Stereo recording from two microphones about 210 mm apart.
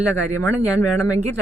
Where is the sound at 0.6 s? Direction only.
5° right (ahead or behind).